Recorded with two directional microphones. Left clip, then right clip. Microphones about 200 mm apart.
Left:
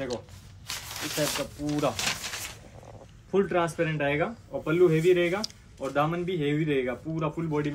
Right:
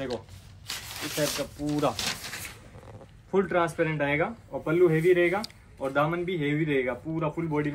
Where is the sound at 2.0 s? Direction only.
25° left (ahead or behind).